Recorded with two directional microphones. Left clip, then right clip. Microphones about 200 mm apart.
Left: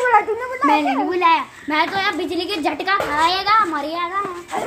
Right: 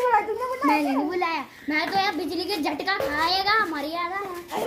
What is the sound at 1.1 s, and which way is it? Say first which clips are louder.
A child's voice: left 10 dB; 15° right (ahead or behind).